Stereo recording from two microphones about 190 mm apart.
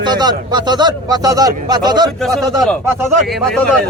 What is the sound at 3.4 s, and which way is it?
Speech, 5° left (ahead or behind).